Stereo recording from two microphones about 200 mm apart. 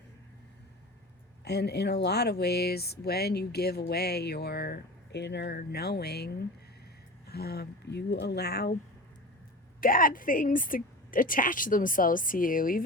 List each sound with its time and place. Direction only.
1.5 s speech: 55° left (ahead or behind)
9.8 s speech: 45° left (ahead or behind)